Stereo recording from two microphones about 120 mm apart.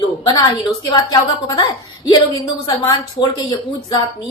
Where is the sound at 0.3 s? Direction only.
35° left (ahead or behind).